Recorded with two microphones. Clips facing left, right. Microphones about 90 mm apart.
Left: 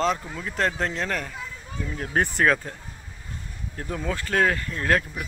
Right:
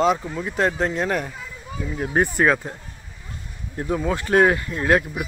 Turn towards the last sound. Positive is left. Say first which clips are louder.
# right 4 dB
turn(degrees=-10)  # may be behind; listen again after turning